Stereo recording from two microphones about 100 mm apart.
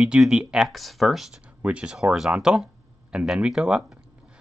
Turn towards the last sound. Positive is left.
turn(degrees=-10)  # may be behind; listen again after turning